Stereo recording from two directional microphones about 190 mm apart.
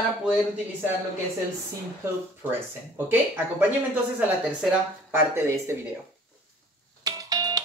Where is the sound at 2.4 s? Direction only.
10° right (ahead or behind).